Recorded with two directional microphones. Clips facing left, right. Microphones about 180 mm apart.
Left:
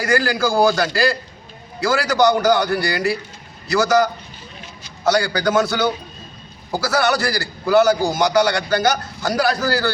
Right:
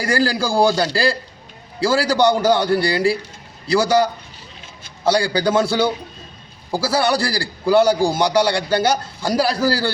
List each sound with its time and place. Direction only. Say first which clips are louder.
0.0 s a man's voice: left 1 dB; 30° right (ahead or behind)